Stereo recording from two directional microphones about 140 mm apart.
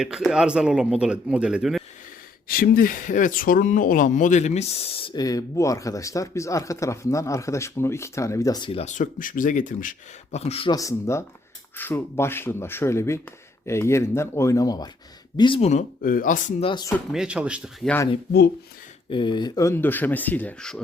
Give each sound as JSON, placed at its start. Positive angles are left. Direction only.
{"t": 0.0, "sound": "a man's voice", "side_deg": -5}
{"t": 2.5, "sound": "speech", "side_deg": 90}
{"t": 5.1, "sound": "speech", "side_deg": 25}
{"t": 8.7, "sound": "speech", "side_deg": 55}
{"t": 10.3, "sound": "speech", "side_deg": 45}
{"t": 10.7, "sound": "speech", "side_deg": 25}
{"t": 15.4, "sound": "speech", "side_deg": 40}
{"t": 15.7, "sound": "speech", "side_deg": 80}
{"t": 16.6, "sound": "speech", "side_deg": 40}
{"t": 17.1, "sound": "speech", "side_deg": -5}
{"t": 19.1, "sound": "speech", "side_deg": 35}